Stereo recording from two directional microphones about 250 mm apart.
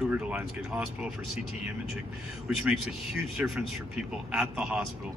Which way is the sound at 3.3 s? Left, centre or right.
Centre.